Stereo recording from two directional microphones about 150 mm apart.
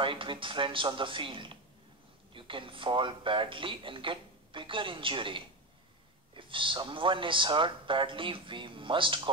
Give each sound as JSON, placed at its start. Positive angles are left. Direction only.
{"t": 0.0, "sound": "speech", "side_deg": -35}